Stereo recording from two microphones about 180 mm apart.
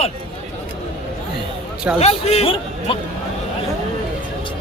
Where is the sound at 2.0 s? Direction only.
35° left (ahead or behind).